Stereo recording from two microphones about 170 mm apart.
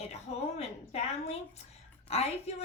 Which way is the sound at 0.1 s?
40° left (ahead or behind).